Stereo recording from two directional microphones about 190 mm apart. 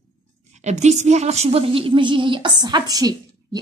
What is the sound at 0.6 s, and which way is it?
A woman's voice, 35° right (ahead or behind).